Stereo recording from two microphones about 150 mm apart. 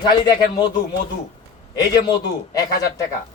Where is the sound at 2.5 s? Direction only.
25° left (ahead or behind).